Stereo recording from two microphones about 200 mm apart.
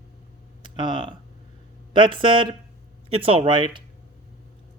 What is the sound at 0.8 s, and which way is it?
Speech, 25° right (ahead or behind).